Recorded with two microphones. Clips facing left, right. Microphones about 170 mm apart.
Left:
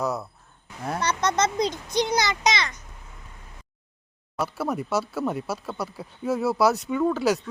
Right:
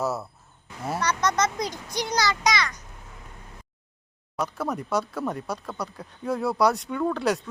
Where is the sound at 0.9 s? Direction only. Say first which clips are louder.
Left 1 dB; 25° left (ahead or behind).